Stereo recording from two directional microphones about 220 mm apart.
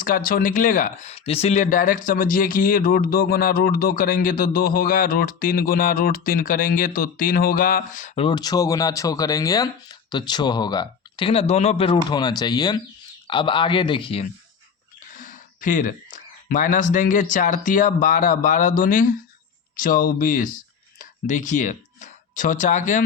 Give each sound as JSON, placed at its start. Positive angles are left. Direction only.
{"t": 0.0, "sound": "speech", "side_deg": 40}
{"t": 15.1, "sound": "a sound", "side_deg": 35}
{"t": 16.5, "sound": "speech", "side_deg": 35}